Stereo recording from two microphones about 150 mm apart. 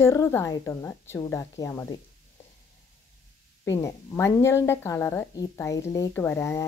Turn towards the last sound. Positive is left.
turn(degrees=20)  # may be behind; listen again after turning